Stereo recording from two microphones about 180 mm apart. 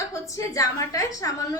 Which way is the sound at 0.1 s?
15° left (ahead or behind).